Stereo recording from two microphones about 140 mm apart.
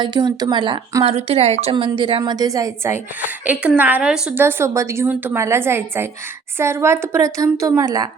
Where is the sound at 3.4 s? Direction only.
10° right (ahead or behind).